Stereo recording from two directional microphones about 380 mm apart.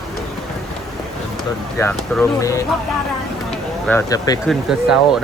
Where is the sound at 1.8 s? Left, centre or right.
Centre.